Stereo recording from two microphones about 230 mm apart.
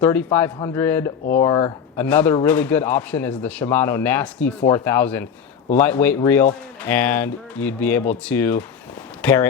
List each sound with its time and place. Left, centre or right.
0.0 s speech: centre